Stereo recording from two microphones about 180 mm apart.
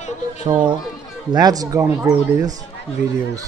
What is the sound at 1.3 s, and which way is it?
Speech, 20° right (ahead or behind).